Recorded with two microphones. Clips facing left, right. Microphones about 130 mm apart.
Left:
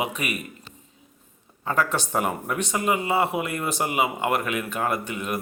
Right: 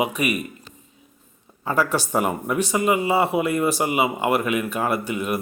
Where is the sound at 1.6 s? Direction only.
10° right (ahead or behind).